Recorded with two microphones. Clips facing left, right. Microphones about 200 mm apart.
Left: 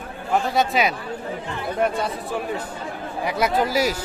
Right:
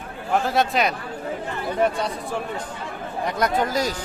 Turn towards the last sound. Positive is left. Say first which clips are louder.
# left 2 dB
turn(degrees=10)  # may be behind; listen again after turning